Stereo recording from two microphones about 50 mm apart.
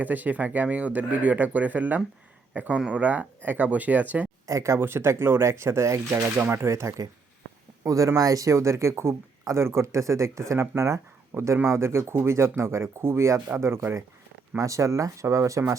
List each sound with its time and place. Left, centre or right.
0.0 s speech: right
4.4 s speech: right
4.8 s speech: right
6.4 s speech: right
6.7 s speech: right
7.9 s speech: right
11.5 s speech: right
14.5 s speech: right